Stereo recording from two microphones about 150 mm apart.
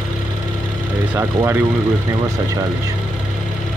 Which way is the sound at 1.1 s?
15° right (ahead or behind).